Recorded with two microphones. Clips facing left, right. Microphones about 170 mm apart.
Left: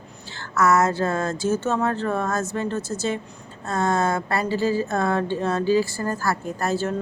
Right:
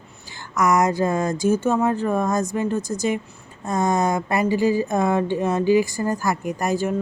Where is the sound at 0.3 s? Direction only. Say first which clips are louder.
Even; 15° right (ahead or behind).